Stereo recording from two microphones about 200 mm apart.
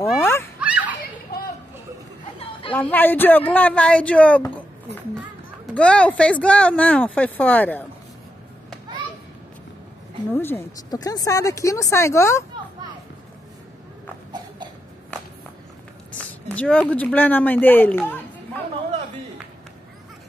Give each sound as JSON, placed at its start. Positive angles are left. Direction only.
{"t": 0.2, "sound": "fowl", "side_deg": 10}
{"t": 0.6, "sound": "children playing", "side_deg": -5}
{"t": 2.7, "sound": "speech", "side_deg": 10}
{"t": 5.8, "sound": "speech", "side_deg": 5}
{"t": 10.3, "sound": "speech", "side_deg": 10}
{"t": 16.2, "sound": "a sound", "side_deg": 5}
{"t": 16.9, "sound": "speech", "side_deg": 10}